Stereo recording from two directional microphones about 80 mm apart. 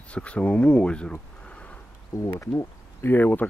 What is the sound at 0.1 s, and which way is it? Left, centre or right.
Speech, centre.